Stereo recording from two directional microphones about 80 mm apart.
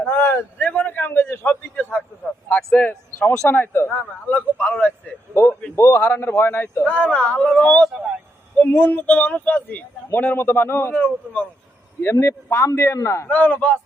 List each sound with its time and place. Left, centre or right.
0.0 s a sound: left
0.7 s a man's voice: left
5.3 s a sound: left
5.7 s a man's voice: left
6.0 s a man's voice: left
6.8 s a man's voice: centre; by 10.9 s left
10.9 s a man's voice: centre
12.0 s a man's voice: left
13.2 s a man's voice: centre